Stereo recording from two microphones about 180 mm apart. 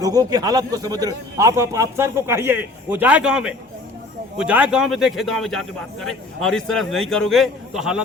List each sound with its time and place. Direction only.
0.0 s a man's voice: 20° right (ahead or behind); by 8.0 s 5° right (ahead or behind)